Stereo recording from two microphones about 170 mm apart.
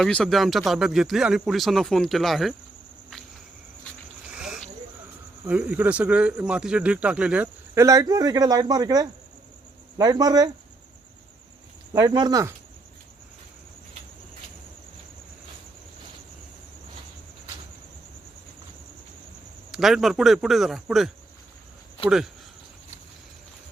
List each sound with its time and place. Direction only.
0.0 s speech: 5° left (ahead or behind)
4.3 s a sound: 5° right (ahead or behind)
5.5 s speech: 10° right (ahead or behind)
7.8 s speech: 20° right (ahead or behind)
11.9 s speech: 25° right (ahead or behind)
19.7 s speech: centre (ahead or behind)